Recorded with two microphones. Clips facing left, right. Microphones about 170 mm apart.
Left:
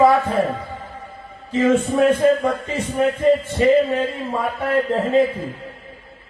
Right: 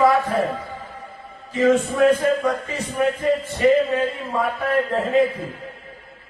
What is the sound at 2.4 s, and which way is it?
Speech, 25° left (ahead or behind).